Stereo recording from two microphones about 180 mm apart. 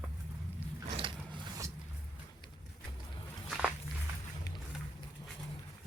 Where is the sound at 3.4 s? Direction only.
5° right (ahead or behind).